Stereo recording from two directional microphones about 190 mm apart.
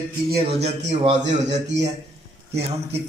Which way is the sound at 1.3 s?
40° right (ahead or behind).